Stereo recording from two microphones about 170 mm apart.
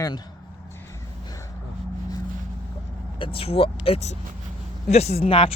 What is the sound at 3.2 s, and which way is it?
Speech, 35° left (ahead or behind).